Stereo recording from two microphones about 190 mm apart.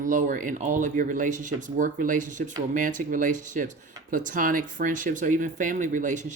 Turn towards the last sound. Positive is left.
turn(degrees=-40)  # may be behind; listen again after turning